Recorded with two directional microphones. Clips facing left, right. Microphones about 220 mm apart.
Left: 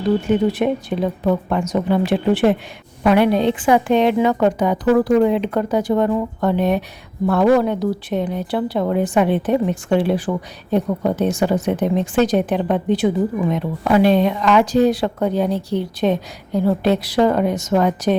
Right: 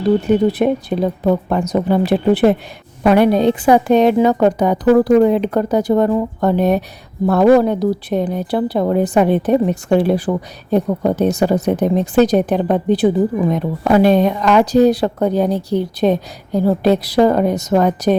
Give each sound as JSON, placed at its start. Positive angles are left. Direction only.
{"t": 0.3, "sound": "a woman's voice", "side_deg": -35}